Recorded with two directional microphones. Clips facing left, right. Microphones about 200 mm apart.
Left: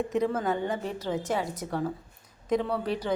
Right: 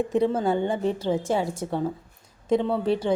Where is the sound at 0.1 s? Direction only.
30° right (ahead or behind).